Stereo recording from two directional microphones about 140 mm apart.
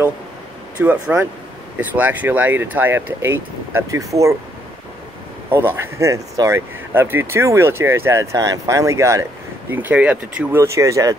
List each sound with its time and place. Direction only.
0.7 s speech: 10° right (ahead or behind)
5.5 s speech: 15° right (ahead or behind)